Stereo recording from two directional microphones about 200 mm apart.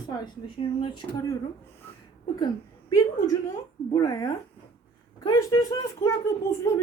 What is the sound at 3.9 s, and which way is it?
Speech, 15° left (ahead or behind).